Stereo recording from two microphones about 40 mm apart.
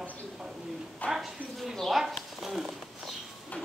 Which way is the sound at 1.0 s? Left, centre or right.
Left.